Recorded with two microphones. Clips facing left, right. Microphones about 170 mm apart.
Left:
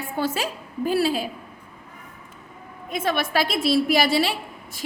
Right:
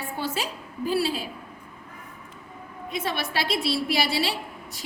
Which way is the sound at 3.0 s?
50° left (ahead or behind).